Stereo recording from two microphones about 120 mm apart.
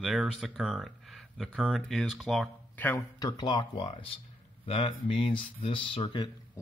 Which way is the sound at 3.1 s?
30° left (ahead or behind).